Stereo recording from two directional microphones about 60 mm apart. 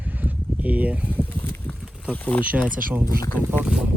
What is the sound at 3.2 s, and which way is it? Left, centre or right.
Speech, left.